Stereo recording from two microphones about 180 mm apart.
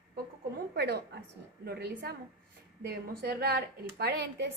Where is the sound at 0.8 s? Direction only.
65° right (ahead or behind).